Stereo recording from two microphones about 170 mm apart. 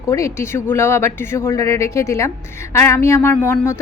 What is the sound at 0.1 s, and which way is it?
A woman's voice, 15° left (ahead or behind).